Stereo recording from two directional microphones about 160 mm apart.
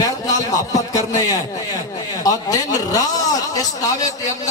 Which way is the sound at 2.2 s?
20° left (ahead or behind).